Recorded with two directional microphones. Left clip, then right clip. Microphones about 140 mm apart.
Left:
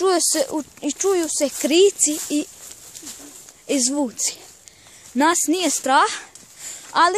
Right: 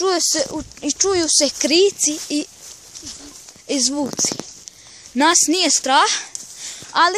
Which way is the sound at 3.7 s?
15° left (ahead or behind).